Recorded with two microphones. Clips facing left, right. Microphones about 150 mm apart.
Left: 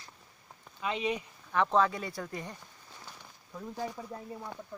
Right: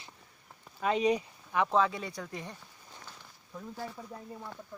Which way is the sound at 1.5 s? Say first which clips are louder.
Left 1 dB; 5° right (ahead or behind).